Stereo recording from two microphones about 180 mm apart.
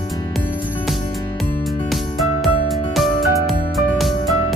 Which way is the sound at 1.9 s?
Centre (ahead or behind).